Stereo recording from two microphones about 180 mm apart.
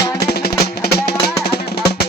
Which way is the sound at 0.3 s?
60° left (ahead or behind).